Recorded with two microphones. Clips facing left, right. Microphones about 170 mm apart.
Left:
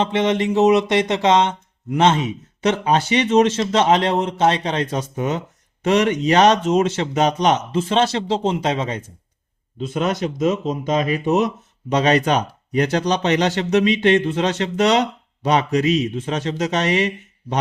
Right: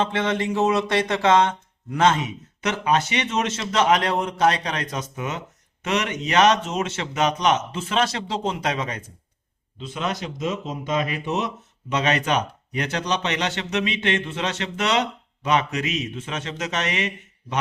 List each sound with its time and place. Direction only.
0.0 s speech: 20° left (ahead or behind)
9.7 s speech: 45° left (ahead or behind)